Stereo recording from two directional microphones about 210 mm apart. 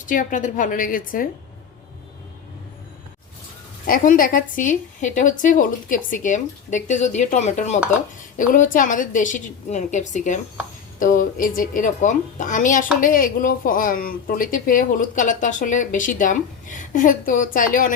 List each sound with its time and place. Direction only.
0.0 s a woman's voice: 40° left (ahead or behind)
3.8 s a woman's voice: 40° left (ahead or behind)